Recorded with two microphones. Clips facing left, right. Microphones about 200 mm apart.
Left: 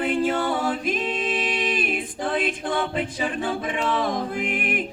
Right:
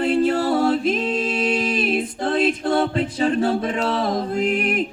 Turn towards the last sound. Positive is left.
turn(degrees=-40)  # may be behind; listen again after turning